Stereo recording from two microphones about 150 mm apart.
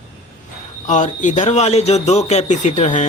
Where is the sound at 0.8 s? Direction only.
55° left (ahead or behind).